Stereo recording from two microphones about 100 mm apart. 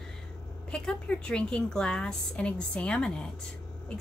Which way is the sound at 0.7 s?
10° left (ahead or behind).